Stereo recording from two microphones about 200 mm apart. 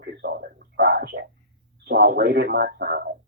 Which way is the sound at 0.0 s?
55° right (ahead or behind).